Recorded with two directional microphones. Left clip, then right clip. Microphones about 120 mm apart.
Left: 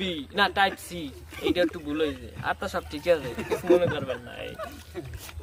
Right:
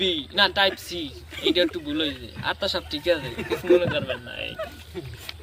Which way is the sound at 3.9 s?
30° left (ahead or behind).